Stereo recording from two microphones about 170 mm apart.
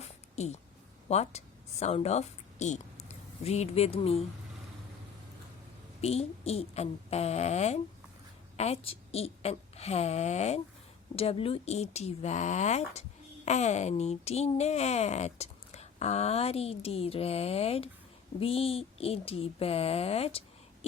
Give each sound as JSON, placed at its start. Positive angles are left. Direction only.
{"t": 0.0, "sound": "a sound", "side_deg": 40}
{"t": 1.0, "sound": "a woman's voice", "side_deg": 40}
{"t": 6.0, "sound": "a woman's voice", "side_deg": 35}